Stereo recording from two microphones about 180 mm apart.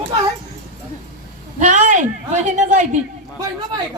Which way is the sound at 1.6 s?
45° right (ahead or behind).